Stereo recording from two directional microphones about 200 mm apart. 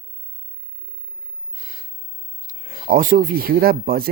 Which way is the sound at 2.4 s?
45° right (ahead or behind).